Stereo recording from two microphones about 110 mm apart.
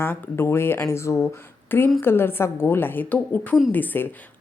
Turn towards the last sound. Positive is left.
turn(degrees=15)  # may be behind; listen again after turning